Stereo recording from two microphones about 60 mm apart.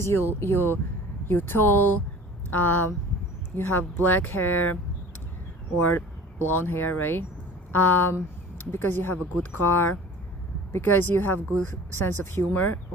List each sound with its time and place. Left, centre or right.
0.0 s speech: left